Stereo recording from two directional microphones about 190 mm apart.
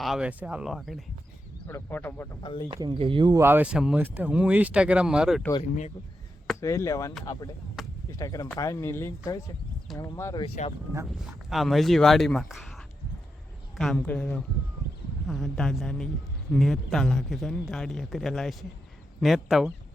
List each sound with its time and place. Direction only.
0.0 s speech: 5° right (ahead or behind)
1.6 s speech: 10° left (ahead or behind)
2.4 s speech: 25° left (ahead or behind)
2.6 s speech: 25° right (ahead or behind)
3.4 s speech: 10° right (ahead or behind)
6.6 s speech: 15° left (ahead or behind)
7.8 s chop: centre (ahead or behind)
8.1 s speech: 20° left (ahead or behind)
10.4 s speech: 35° left (ahead or behind)
10.9 s speech: 5° right (ahead or behind)
13.7 s speech: 5° left (ahead or behind)